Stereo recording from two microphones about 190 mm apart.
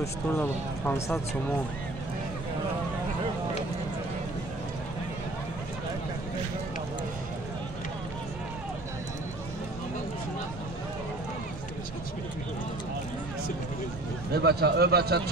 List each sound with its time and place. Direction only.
0.0 s speech: 10° left (ahead or behind)
14.3 s a man's voice: 55° right (ahead or behind)